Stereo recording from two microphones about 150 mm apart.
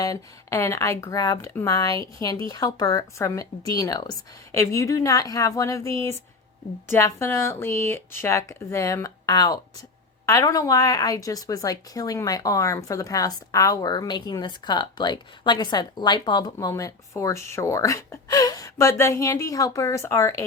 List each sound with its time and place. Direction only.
0.0 s a woman's voice: 20° left (ahead or behind)